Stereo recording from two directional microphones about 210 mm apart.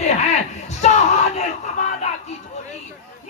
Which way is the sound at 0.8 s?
35° left (ahead or behind).